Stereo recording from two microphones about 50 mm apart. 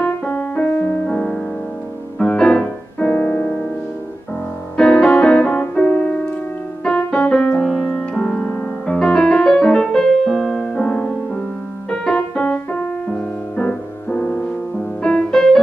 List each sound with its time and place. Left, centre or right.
0.0 s music: left; by 2.7 s centre
3.2 s music: left
4.7 s music: centre
6.8 s piano: left
7.6 s keyboard: centre
8.2 s keyboard: centre
8.8 s music: centre
11.9 s keyboard: centre
13.1 s music: centre